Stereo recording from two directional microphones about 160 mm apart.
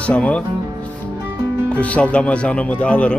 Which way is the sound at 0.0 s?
10° left (ahead or behind).